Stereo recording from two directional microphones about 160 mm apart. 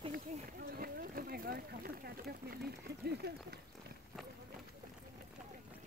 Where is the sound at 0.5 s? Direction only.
70° right (ahead or behind).